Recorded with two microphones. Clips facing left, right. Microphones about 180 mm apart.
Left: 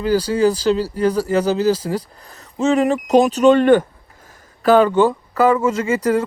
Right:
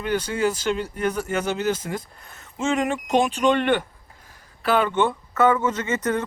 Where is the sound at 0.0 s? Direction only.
35° left (ahead or behind).